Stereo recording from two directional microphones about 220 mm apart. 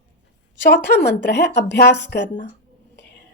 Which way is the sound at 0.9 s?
50° left (ahead or behind).